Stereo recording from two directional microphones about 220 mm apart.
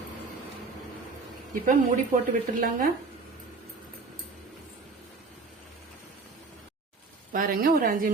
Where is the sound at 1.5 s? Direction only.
40° right (ahead or behind).